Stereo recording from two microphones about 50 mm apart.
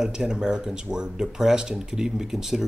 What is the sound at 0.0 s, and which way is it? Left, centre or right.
Speech, centre.